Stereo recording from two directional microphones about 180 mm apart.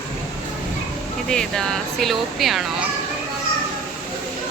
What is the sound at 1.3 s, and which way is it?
A woman's voice, 5° left (ahead or behind).